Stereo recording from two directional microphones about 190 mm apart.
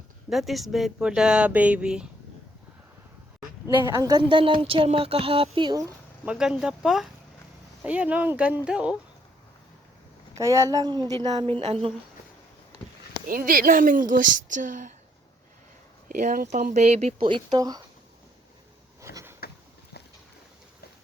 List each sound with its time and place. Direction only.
0.3 s speech: centre (ahead or behind)
3.4 s speech: 15° right (ahead or behind)
6.2 s speech: 5° right (ahead or behind)
10.3 s speech: 15° right (ahead or behind)
11.6 s speech: 30° right (ahead or behind)
13.2 s speech: 45° right (ahead or behind)
16.0 s speech: 45° right (ahead or behind)
17.2 s speech: 25° right (ahead or behind)
19.0 s a sound: 15° right (ahead or behind)